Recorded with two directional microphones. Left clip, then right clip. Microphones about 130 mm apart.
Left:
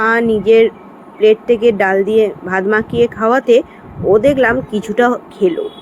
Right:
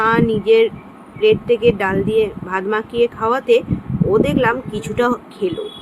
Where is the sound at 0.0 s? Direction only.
30° left (ahead or behind).